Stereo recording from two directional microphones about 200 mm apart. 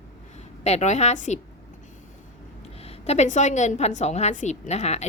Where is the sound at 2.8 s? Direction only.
35° left (ahead or behind).